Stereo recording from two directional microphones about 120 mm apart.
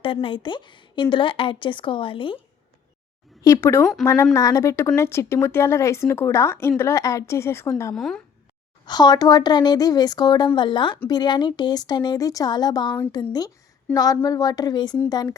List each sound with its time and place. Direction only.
0.0 s speech: 45° left (ahead or behind)
3.4 s speech: 25° left (ahead or behind)
7.9 s speech: 5° left (ahead or behind)
8.9 s a woman's voice: 35° left (ahead or behind)